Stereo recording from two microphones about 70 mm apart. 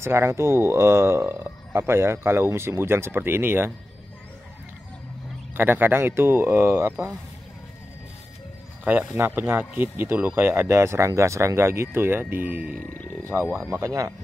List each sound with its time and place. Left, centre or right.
0.0 s speech: right
5.5 s speech: right
8.8 s speech: right
13.7 s speech: right